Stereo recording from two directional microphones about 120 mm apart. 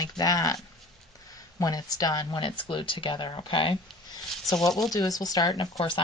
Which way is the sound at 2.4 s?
45° left (ahead or behind).